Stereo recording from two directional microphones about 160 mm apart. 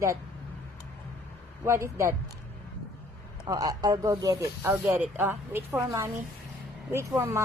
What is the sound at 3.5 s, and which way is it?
Speech, 20° right (ahead or behind).